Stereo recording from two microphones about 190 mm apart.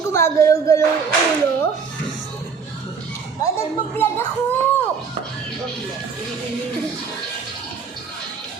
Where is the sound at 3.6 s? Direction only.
10° left (ahead or behind).